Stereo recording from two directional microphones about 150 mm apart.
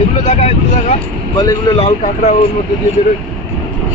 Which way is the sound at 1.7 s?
45° left (ahead or behind).